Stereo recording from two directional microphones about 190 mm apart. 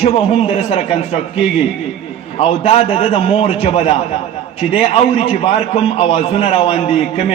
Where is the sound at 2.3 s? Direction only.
30° left (ahead or behind).